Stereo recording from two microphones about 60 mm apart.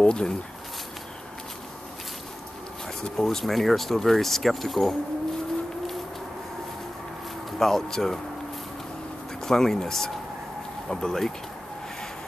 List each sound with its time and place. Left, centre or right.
0.0 s speech: centre
3.0 s speech: centre
7.5 s speech: centre
9.4 s speech: centre